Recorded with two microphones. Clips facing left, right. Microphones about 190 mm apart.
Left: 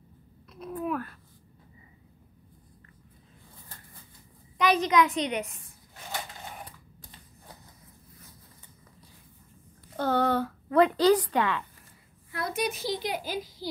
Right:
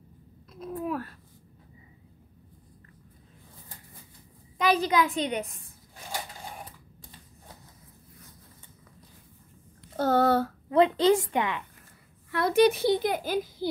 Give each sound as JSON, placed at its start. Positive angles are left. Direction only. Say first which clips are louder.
{"t": 0.6, "sound": "speech", "louder": "even", "side_deg": -35}
{"t": 4.6, "sound": "a woman's voice", "louder": "left 1 dB", "side_deg": -30}
{"t": 9.9, "sound": "speech", "louder": "right 3 dB", "side_deg": -40}
{"t": 10.7, "sound": "a woman's voice", "louder": "even", "side_deg": -25}
{"t": 12.3, "sound": "a woman's voice", "louder": "right 10 dB", "side_deg": -70}